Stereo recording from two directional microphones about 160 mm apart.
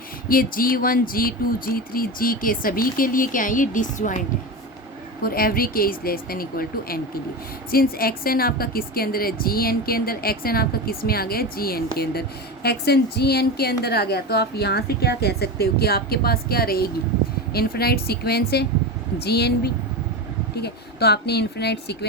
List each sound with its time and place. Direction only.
0.3 s speech: 65° left (ahead or behind)
5.2 s a woman's voice: 70° left (ahead or behind)
12.6 s a woman's voice: 90° left